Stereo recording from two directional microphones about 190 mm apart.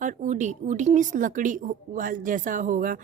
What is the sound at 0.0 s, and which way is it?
Speech, 40° right (ahead or behind).